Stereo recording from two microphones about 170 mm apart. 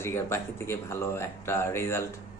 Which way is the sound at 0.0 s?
15° left (ahead or behind).